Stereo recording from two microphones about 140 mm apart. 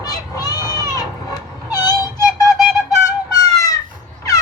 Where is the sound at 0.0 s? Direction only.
25° left (ahead or behind).